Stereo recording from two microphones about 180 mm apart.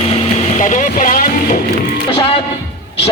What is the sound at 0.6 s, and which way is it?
Music, 45° left (ahead or behind).